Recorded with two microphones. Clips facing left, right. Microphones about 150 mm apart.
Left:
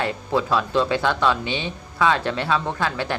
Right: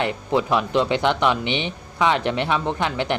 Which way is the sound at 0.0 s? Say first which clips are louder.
Right 1 dB; 20° right (ahead or behind).